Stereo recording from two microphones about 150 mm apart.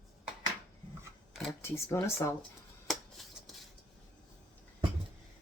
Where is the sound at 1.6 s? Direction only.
15° left (ahead or behind).